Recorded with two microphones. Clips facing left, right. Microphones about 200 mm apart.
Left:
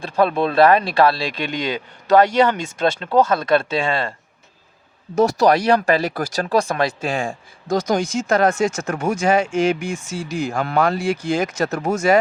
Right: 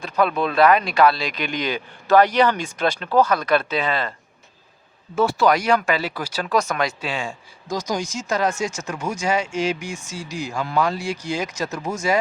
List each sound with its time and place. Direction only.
0.0 s speech: 30° left (ahead or behind)
5.1 s speech: 40° left (ahead or behind)
7.0 s speech: 50° left (ahead or behind)